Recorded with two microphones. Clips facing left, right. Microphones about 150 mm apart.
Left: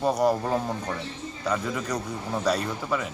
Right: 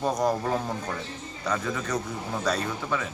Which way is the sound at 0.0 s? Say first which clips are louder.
Left 2 dB; 10° left (ahead or behind).